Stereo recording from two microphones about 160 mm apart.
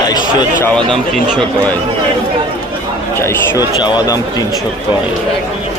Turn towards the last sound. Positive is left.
turn(degrees=25)  # may be behind; listen again after turning